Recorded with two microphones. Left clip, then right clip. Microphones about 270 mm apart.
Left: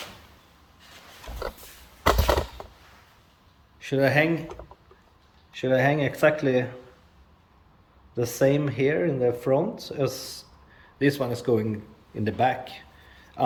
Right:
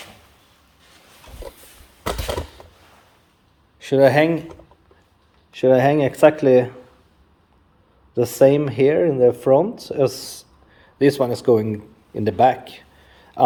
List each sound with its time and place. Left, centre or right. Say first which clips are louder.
3.8 s speech: right 8 dB; right
5.5 s speech: right 8 dB; right
8.1 s speech: right 8 dB; right